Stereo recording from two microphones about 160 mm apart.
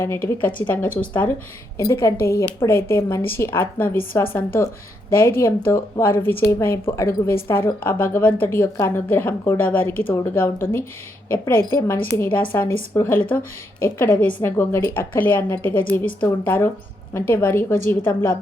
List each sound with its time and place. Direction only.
0.0 s a woman's voice: 15° left (ahead or behind)